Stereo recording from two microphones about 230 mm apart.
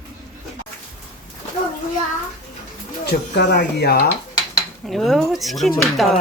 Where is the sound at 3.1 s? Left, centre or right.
Left.